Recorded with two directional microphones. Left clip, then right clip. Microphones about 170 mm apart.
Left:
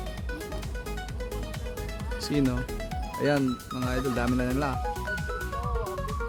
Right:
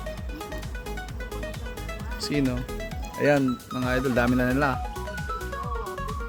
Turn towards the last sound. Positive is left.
turn(degrees=-20)  # may be behind; listen again after turning